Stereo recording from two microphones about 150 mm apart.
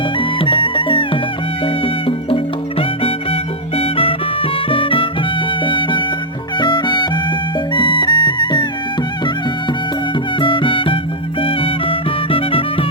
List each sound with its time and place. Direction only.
0.2 s music: 35° left (ahead or behind)
3.8 s music: 35° left (ahead or behind)
10.4 s music: 35° left (ahead or behind)